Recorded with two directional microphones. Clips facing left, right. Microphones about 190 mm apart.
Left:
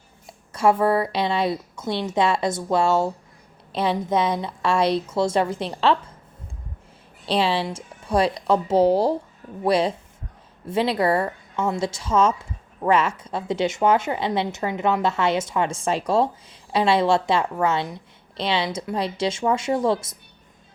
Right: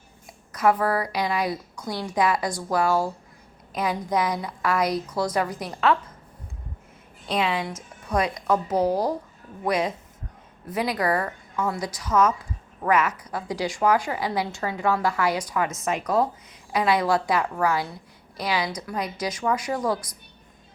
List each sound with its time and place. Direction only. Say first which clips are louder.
0.3 s speech: left 2 dB; 30° left (ahead or behind)
7.3 s speech: left 3 dB; 30° left (ahead or behind)